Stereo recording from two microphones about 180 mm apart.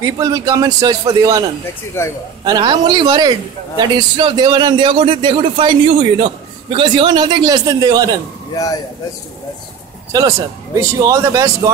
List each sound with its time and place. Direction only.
0.0 s a man's voice: 20° right (ahead or behind)
10.1 s speech: 20° right (ahead or behind)